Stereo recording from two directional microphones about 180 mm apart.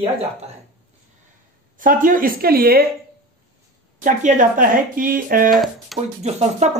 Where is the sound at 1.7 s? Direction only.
50° right (ahead or behind).